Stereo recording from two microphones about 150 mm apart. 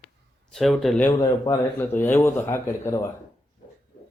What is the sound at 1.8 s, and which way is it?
Speech, 15° left (ahead or behind).